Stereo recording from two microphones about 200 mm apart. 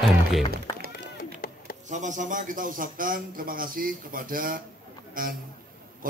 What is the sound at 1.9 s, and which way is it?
A man's voice, 40° right (ahead or behind).